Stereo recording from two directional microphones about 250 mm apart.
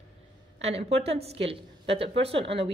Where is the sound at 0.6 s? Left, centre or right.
Right.